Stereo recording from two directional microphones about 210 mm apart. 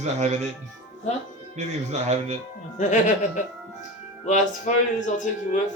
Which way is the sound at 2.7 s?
35° left (ahead or behind).